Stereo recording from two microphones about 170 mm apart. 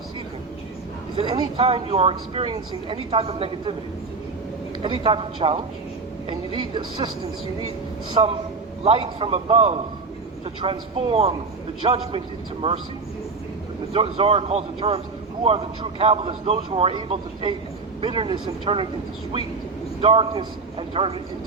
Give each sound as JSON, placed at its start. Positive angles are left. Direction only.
{"t": 1.1, "sound": "speech", "side_deg": -30}
{"t": 4.8, "sound": "speech", "side_deg": -30}
{"t": 8.1, "sound": "speech", "side_deg": -35}
{"t": 13.9, "sound": "speech", "side_deg": -35}
{"t": 20.0, "sound": "a man's voice", "side_deg": -35}